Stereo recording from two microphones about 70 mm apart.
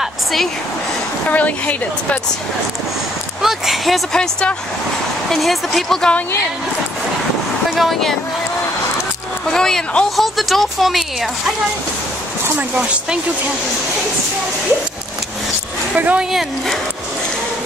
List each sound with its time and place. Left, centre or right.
0.0 s a sound: centre
1.3 s a woman's voice: left
3.4 s speech: centre
4.2 s speech: centre
5.3 s speech: centre
7.7 s speech: centre
9.5 s speech: centre
12.5 s speech: centre
15.9 s speech: right
16.2 s speech: centre